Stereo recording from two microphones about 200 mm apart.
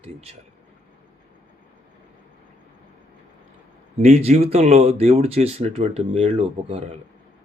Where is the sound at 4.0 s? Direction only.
30° right (ahead or behind).